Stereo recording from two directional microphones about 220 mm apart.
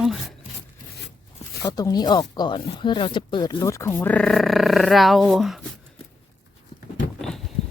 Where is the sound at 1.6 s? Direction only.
15° left (ahead or behind); by 5.6 s centre (ahead or behind).